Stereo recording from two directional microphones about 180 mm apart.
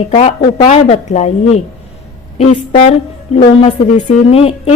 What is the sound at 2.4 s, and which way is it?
A woman's voice, 35° left (ahead or behind).